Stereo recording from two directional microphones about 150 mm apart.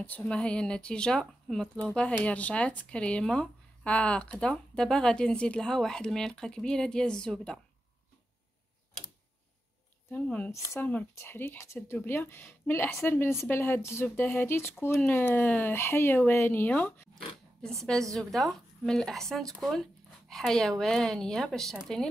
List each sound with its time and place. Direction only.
0.0 s speech: 10° left (ahead or behind)
10.1 s speech: 10° left (ahead or behind)